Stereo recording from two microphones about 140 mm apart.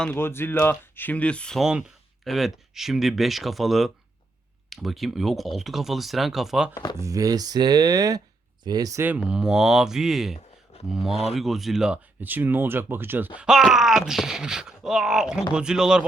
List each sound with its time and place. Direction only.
0.0 s speech: 15° left (ahead or behind); by 6.7 s centre (ahead or behind)
6.9 s speech: 20° right (ahead or behind)
9.0 s speech: 10° right (ahead or behind)